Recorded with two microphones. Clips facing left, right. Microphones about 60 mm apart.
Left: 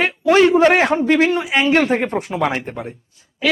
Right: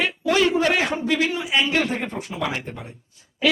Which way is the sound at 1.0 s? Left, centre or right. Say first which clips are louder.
Left 7 dB; left.